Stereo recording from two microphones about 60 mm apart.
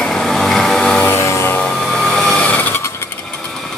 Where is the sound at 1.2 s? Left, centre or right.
Left.